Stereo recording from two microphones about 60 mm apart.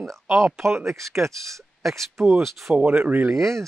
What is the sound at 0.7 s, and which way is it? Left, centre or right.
Speech, right.